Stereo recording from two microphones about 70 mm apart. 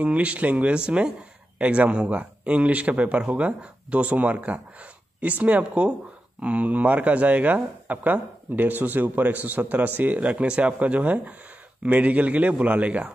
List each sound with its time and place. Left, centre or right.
0.0 s speech: centre